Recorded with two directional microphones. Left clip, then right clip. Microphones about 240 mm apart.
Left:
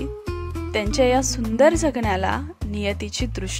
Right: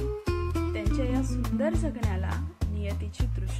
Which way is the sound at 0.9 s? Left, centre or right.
Left.